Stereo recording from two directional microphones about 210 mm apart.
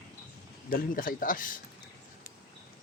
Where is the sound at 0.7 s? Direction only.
40° left (ahead or behind).